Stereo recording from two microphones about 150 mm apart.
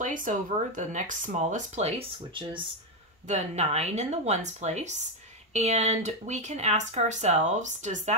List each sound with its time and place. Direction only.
0.0 s speech: 60° right (ahead or behind); by 2.6 s 35° right (ahead or behind)
3.3 s speech: 50° right (ahead or behind)